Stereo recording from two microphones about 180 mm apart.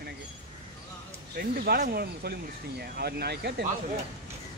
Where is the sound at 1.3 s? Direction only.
60° right (ahead or behind).